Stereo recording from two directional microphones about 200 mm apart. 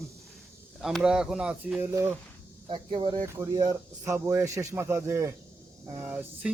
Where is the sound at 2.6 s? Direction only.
25° right (ahead or behind).